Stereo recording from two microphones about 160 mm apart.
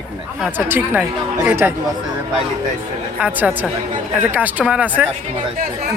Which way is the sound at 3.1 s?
10° right (ahead or behind).